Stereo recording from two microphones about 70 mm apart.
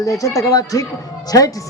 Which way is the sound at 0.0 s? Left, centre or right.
Left.